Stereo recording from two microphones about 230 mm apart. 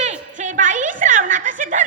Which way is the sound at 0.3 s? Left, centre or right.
Right.